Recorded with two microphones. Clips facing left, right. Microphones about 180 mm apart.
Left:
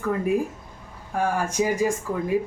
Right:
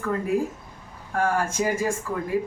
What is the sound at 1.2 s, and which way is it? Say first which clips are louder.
Speech: even; 15° left (ahead or behind).